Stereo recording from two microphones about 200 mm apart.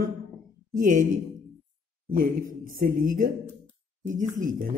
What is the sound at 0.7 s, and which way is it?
Speech, 40° right (ahead or behind).